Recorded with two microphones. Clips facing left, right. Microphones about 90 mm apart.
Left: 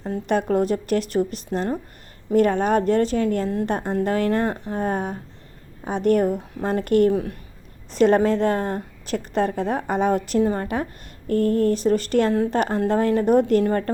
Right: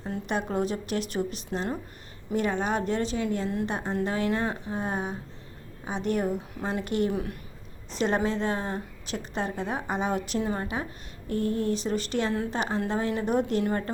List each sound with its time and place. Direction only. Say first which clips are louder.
0.3 s a woman's voice: left 8 dB; 50° left (ahead or behind)
7.1 s a woman's voice: left 7 dB; 30° left (ahead or behind)
7.9 s a woman's voice: left 9 dB; 50° left (ahead or behind)
12.3 s a woman's voice: left 8 dB; 35° left (ahead or behind)
12.5 s a woman's voice: left 8 dB; 50° left (ahead or behind)